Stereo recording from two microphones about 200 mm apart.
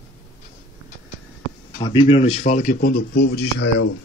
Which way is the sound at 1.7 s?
25° left (ahead or behind).